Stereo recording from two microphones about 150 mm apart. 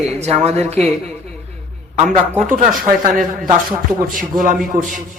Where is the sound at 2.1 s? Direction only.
55° right (ahead or behind).